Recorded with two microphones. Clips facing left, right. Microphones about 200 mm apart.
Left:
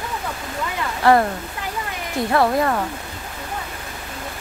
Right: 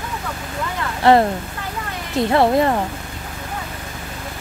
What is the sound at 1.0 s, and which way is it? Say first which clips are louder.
Speech: right 2 dB; 25° right (ahead or behind).